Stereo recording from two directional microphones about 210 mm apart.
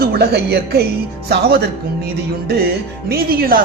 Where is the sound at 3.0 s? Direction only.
45° right (ahead or behind).